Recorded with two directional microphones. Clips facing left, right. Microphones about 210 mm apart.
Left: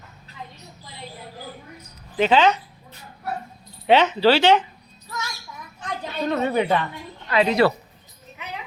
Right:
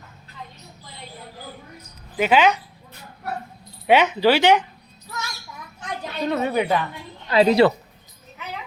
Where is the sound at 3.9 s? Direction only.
10° right (ahead or behind).